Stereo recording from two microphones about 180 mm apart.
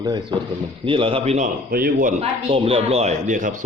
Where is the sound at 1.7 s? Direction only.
55° right (ahead or behind).